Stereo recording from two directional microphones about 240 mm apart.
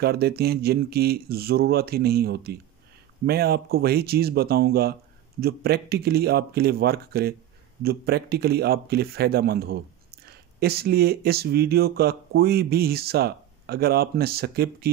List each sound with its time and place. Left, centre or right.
0.0 s speech: right